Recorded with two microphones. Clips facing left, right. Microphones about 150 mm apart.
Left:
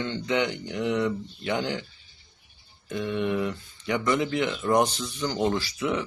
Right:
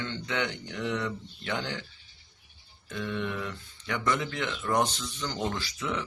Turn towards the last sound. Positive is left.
turn(degrees=10)  # may be behind; listen again after turning